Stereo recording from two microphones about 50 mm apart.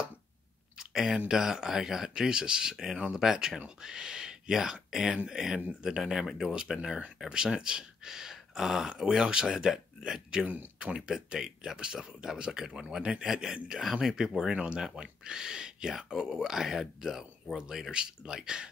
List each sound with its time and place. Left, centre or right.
0.7 s a sound: centre
1.3 s speech: centre
10.4 s speech: right; by 18.7 s centre